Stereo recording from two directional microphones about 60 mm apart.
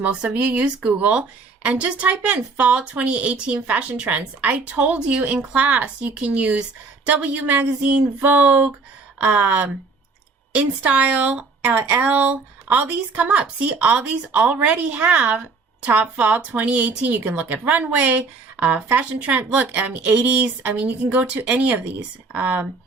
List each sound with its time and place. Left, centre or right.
0.0 s a woman's voice: right